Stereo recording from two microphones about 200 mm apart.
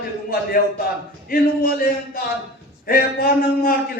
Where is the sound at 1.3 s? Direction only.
45° left (ahead or behind).